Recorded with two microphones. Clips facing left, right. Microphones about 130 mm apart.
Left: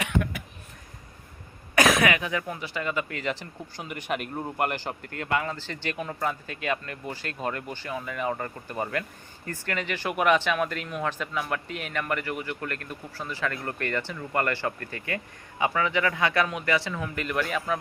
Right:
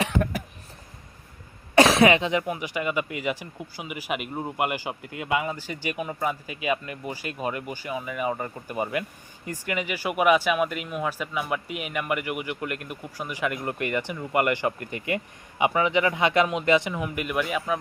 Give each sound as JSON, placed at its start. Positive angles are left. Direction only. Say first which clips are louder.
{"t": 0.0, "sound": "cough", "louder": "right 3 dB", "side_deg": -35}
{"t": 1.7, "sound": "speech", "louder": "right 5 dB", "side_deg": -30}